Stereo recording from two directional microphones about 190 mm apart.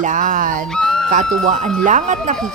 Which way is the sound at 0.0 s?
40° right (ahead or behind).